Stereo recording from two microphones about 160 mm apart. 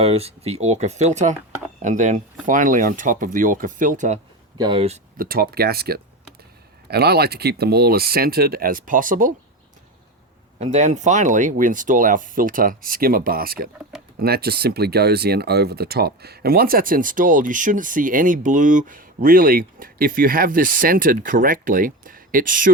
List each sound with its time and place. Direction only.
0.0 s speech: 40° right (ahead or behind)
4.5 s speech: 30° right (ahead or behind)
5.1 s speech: 65° right (ahead or behind)
10.6 s speech: 45° right (ahead or behind); by 13.7 s 65° right (ahead or behind)
14.2 s speech: 75° right (ahead or behind); by 22.7 s 60° right (ahead or behind)